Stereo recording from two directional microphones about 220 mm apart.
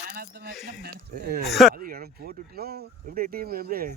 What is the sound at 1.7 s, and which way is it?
Speech, 40° right (ahead or behind).